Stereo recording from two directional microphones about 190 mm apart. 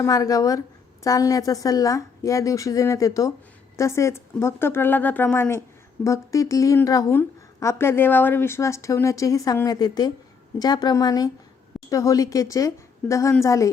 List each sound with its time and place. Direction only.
0.0 s a woman's voice: 20° left (ahead or behind)